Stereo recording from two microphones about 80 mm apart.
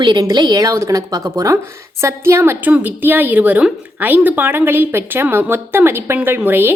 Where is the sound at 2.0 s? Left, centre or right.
Right.